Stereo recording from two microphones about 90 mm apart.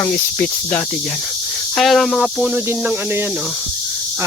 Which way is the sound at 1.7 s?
Centre (ahead or behind).